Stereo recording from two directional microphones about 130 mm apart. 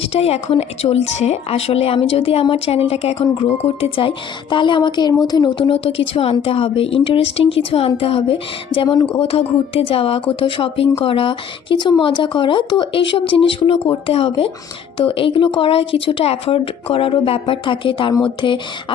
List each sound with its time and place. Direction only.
0.0 s a woman's voice: 50° left (ahead or behind)